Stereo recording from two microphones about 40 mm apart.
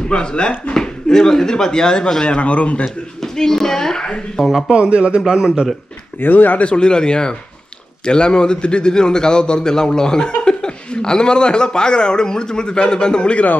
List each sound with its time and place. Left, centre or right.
0.1 s a man's voice: left
0.7 s speech: centre
2.3 s a man's voice: left
3.2 s a child's voice: centre
4.6 s a man's voice: right
6.2 s speech: left
6.6 s a man's voice: left